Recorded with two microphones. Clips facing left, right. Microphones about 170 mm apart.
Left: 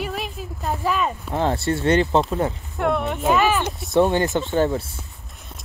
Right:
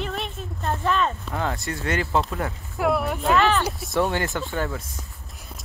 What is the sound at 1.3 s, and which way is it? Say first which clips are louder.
Speech: left 6 dB; 30° left (ahead or behind).